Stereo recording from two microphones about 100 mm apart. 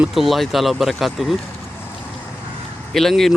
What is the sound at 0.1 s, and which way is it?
Speech, centre (ahead or behind).